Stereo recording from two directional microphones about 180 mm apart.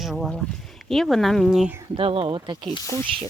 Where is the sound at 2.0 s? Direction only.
30° right (ahead or behind).